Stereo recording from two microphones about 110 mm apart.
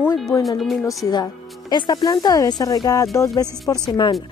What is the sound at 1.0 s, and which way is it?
Speech, 35° left (ahead or behind).